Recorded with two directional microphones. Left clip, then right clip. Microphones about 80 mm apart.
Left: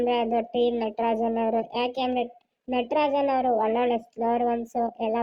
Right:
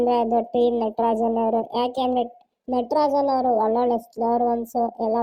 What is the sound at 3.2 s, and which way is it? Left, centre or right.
Speech, centre.